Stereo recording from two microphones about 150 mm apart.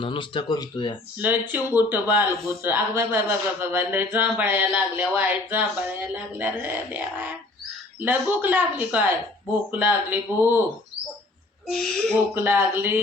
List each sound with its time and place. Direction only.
0.0 s speech: 35° left (ahead or behind)
1.2 s speech: 10° right (ahead or behind)
11.7 s speech: centre (ahead or behind)
12.3 s speech: 15° right (ahead or behind)